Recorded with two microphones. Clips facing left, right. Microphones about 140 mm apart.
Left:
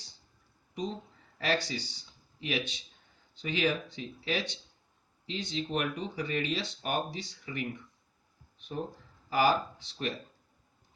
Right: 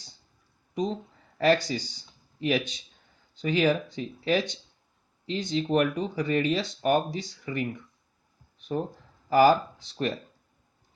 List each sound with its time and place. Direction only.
1.4 s speech: 40° right (ahead or behind)
9.3 s speech: 40° right (ahead or behind)